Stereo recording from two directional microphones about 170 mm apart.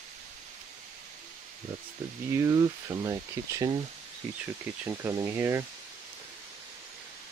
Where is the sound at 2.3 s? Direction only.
20° right (ahead or behind).